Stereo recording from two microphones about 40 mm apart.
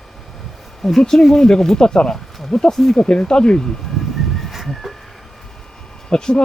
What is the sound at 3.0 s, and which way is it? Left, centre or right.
Speech, left.